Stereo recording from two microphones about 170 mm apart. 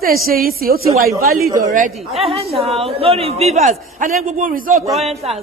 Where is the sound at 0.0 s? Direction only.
60° right (ahead or behind).